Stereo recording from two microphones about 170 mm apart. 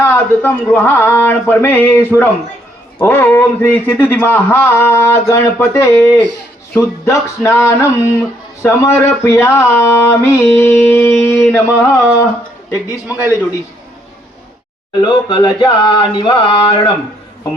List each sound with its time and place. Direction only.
0.0 s a sound: 10° left (ahead or behind)
13.1 s a man's voice: 10° right (ahead or behind)
15.0 s music: 25° left (ahead or behind)